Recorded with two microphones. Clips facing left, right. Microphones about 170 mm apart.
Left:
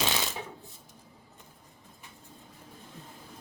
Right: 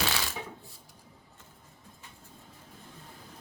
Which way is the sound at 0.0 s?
20° left (ahead or behind).